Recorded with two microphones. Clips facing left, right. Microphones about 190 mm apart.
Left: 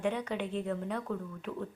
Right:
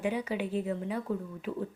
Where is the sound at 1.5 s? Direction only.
25° right (ahead or behind).